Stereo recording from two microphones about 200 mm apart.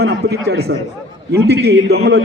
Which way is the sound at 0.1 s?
55° right (ahead or behind).